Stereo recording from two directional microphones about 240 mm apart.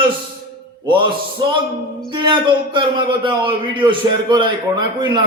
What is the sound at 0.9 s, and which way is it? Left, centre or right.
Music, centre.